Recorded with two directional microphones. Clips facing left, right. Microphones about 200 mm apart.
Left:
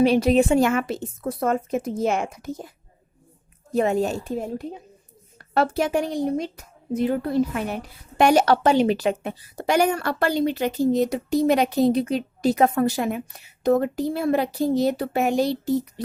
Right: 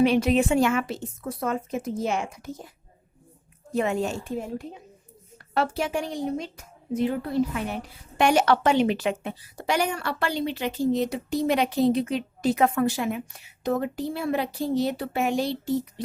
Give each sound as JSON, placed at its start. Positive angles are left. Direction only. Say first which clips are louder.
{"t": 0.0, "sound": "a woman's voice", "louder": "left 3 dB", "side_deg": 35}
{"t": 3.8, "sound": "a woman's voice", "louder": "left 4 dB", "side_deg": 40}
{"t": 8.2, "sound": "a woman's voice", "louder": "left 3 dB", "side_deg": 40}